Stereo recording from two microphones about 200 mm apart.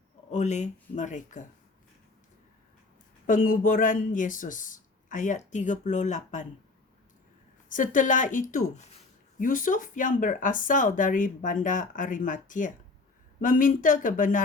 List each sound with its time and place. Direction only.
0.3 s speech: 35° left (ahead or behind)
3.2 s speech: 40° left (ahead or behind)
7.7 s speech: 40° left (ahead or behind)